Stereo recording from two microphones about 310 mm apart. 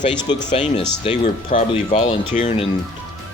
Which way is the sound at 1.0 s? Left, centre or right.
Left.